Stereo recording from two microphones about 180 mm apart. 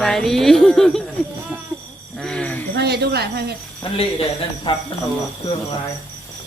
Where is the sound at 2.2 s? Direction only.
5° left (ahead or behind).